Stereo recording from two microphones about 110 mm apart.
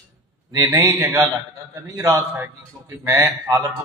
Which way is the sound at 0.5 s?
30° right (ahead or behind).